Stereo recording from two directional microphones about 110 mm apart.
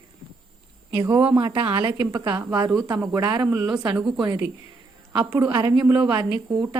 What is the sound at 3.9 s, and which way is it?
Speech, 5° right (ahead or behind).